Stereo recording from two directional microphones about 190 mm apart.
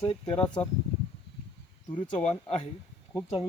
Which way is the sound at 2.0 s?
25° left (ahead or behind).